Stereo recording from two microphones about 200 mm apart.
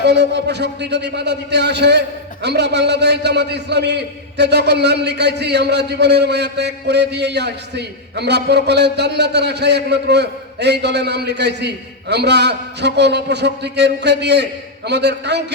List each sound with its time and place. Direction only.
0.0 s a man's voice: 55° right (ahead or behind)